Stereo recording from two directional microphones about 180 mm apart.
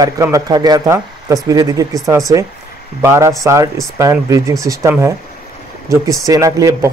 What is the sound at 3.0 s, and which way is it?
Speech, 15° right (ahead or behind).